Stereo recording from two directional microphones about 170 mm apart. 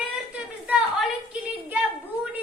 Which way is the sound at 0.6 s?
5° right (ahead or behind).